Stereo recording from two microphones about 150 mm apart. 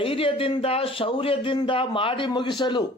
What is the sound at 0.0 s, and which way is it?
A man's voice, 35° left (ahead or behind).